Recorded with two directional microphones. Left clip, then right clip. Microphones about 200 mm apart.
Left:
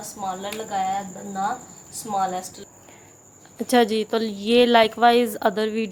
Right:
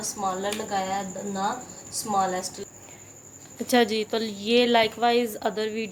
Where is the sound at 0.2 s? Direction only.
25° left (ahead or behind).